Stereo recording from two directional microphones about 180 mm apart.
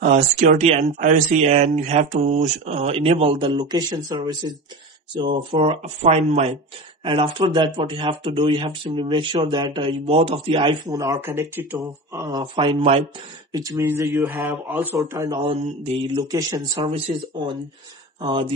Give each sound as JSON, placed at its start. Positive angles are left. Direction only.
{"t": 0.0, "sound": "speech", "side_deg": -40}
{"t": 13.5, "sound": "speech", "side_deg": -20}
{"t": 15.4, "sound": "speech", "side_deg": -35}
{"t": 16.2, "sound": "speech", "side_deg": -20}
{"t": 18.2, "sound": "speech", "side_deg": -25}